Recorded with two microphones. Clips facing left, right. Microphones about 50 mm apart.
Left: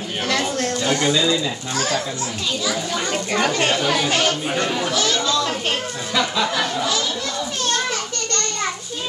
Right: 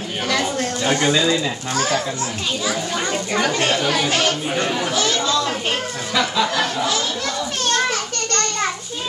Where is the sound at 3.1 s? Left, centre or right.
Centre.